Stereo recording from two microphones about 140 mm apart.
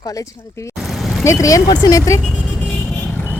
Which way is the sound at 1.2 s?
20° left (ahead or behind).